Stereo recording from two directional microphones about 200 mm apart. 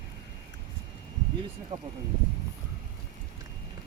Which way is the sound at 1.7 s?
20° right (ahead or behind).